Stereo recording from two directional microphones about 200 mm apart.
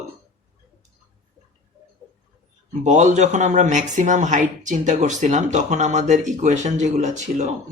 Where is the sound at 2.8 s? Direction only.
35° right (ahead or behind).